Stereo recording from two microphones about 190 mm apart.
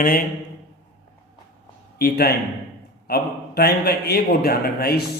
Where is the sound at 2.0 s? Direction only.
55° left (ahead or behind).